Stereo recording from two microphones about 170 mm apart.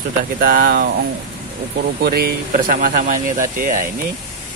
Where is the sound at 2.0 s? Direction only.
65° right (ahead or behind).